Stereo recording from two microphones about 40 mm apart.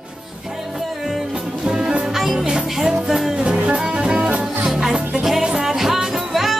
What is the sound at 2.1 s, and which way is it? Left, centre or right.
Music, centre.